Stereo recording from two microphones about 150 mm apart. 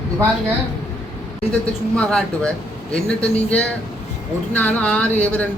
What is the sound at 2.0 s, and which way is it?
A man's voice, 5° left (ahead or behind).